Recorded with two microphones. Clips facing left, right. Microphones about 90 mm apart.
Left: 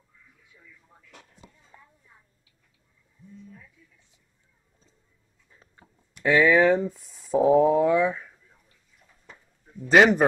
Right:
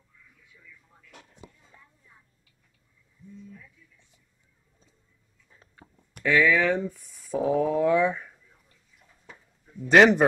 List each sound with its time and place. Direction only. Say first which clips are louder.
5.8 s a sound: right 7 dB; centre (ahead or behind)
6.2 s speech: left 3 dB; 30° left (ahead or behind)
7.9 s speech: even; centre (ahead or behind)
9.8 s a man's voice: even; centre (ahead or behind)